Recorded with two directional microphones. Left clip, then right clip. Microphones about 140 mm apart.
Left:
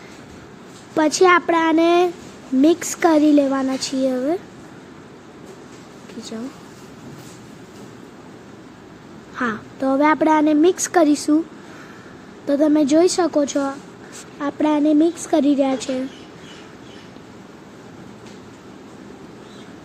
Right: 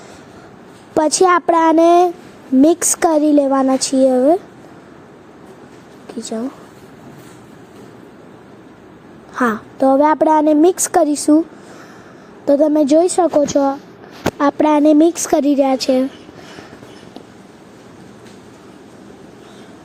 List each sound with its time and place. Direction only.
0.9 s a woman's voice: 35° right (ahead or behind)
6.1 s a sound: 35° right (ahead or behind)
9.3 s a woman's voice: 35° right (ahead or behind)
12.5 s a woman's voice: 30° right (ahead or behind)
13.2 s speech: centre (ahead or behind)
14.3 s speech: 50° right (ahead or behind)